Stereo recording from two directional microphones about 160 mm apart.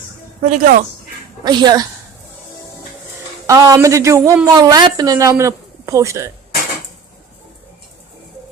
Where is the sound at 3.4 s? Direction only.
20° right (ahead or behind).